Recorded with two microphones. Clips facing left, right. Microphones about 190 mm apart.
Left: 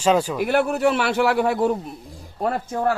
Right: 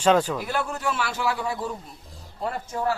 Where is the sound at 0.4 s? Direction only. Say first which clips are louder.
Left 9 dB; 65° left (ahead or behind).